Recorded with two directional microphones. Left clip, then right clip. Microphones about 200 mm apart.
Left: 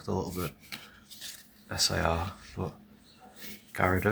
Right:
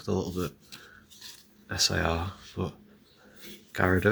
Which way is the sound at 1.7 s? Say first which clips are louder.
Right 1 dB; 10° right (ahead or behind).